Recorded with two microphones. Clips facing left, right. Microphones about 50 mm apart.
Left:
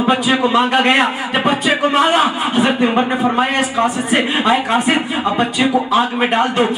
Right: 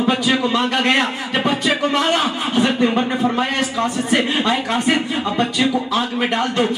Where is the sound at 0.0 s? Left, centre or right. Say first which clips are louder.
Left 3 dB; left.